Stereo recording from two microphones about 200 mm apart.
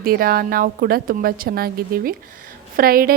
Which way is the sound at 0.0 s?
50° right (ahead or behind).